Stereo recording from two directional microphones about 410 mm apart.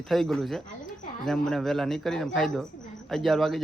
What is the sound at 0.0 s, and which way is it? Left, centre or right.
Speech, centre.